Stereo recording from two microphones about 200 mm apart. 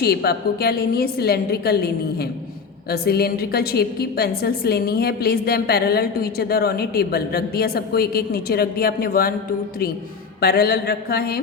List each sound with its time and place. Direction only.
0.0 s a woman's voice: 50° left (ahead or behind)
10.4 s a woman's voice: 50° left (ahead or behind)